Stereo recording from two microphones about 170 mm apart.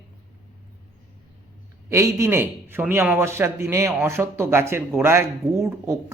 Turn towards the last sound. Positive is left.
turn(degrees=-15)  # may be behind; listen again after turning